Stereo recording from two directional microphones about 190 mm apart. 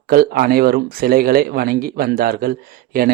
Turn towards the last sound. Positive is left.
turn(degrees=-50)  # may be behind; listen again after turning